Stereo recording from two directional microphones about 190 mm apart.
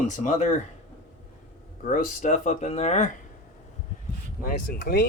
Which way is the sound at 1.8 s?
40° left (ahead or behind).